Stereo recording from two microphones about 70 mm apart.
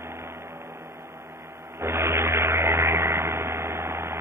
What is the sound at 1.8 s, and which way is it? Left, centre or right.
Vehicle, right.